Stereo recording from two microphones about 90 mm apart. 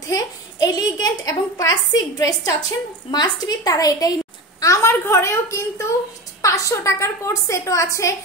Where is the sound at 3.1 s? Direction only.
50° left (ahead or behind); by 7.9 s 35° left (ahead or behind).